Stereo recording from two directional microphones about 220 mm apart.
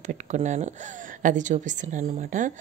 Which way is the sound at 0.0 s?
35° right (ahead or behind).